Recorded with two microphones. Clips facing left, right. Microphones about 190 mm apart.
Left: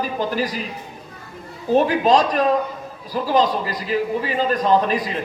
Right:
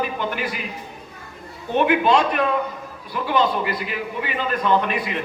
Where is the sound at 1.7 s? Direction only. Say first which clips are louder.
Left 2 dB; 35° left (ahead or behind).